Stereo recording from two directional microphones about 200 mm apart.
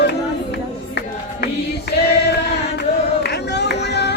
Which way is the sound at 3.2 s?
55° left (ahead or behind).